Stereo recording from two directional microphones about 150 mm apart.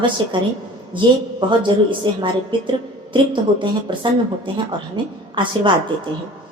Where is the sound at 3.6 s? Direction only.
30° right (ahead or behind).